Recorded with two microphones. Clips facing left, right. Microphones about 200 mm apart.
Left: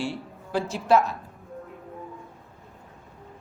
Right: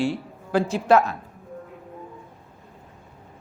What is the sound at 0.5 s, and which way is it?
Speech, 55° right (ahead or behind).